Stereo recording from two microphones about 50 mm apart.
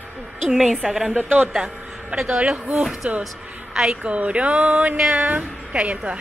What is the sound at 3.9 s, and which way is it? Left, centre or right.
A woman's voice, right.